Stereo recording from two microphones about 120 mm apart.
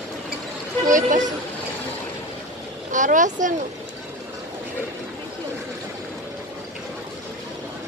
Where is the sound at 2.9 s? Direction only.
90° right.